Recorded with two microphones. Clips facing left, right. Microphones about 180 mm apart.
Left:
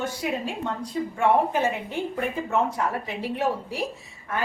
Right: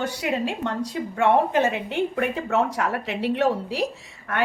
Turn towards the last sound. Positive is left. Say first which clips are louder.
# right 2 dB
turn(degrees=-70)  # may be behind; listen again after turning